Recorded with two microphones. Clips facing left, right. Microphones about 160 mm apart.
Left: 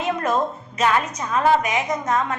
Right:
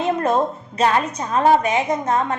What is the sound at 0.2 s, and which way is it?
A woman's voice, 30° right (ahead or behind).